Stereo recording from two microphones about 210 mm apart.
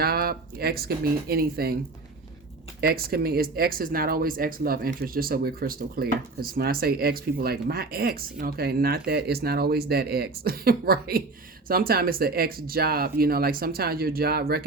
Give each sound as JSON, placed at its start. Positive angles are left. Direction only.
{"t": 0.0, "sound": "speech", "side_deg": -45}
{"t": 2.8, "sound": "speech", "side_deg": -45}